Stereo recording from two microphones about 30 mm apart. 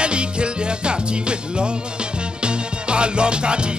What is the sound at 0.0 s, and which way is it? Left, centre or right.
Music, right.